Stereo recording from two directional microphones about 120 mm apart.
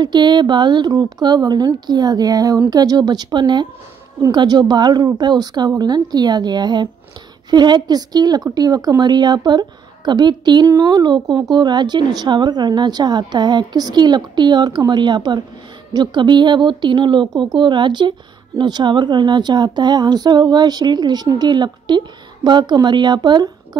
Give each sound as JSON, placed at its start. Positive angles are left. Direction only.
{"t": 0.0, "sound": "speech", "side_deg": -40}